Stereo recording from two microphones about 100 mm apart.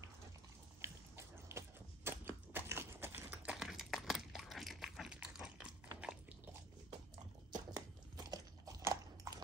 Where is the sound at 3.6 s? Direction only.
5° right (ahead or behind).